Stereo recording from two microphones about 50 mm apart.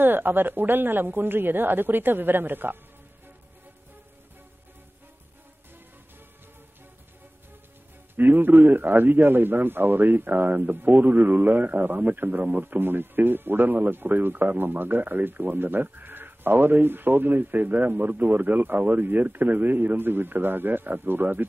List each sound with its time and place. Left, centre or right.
0.0 s speech: right
8.2 s a man's voice: right